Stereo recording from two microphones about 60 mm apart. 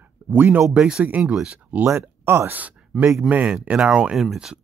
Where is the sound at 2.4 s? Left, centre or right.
Right.